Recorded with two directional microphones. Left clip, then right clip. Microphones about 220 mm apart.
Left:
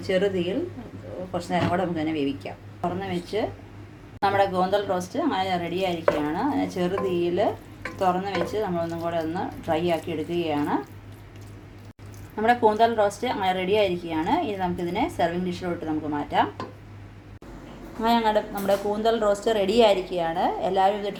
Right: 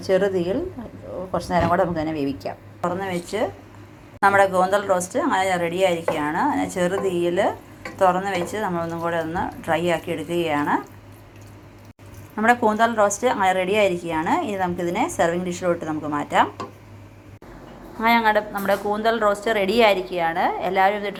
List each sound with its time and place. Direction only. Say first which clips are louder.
0.1 s a woman's voice: right 4 dB; 15° right (ahead or behind)
3.3 s a woman's voice: right 3 dB; 5° right (ahead or behind)
12.4 s a woman's voice: right 2 dB; 10° right (ahead or behind)
18.0 s speech: right 4 dB; 5° right (ahead or behind)